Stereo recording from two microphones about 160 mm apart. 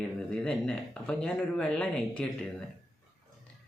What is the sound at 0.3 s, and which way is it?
Speech, 5° left (ahead or behind).